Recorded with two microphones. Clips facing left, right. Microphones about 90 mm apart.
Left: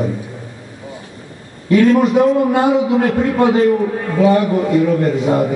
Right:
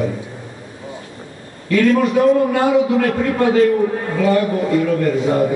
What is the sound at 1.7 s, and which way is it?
A man's voice, 25° left (ahead or behind).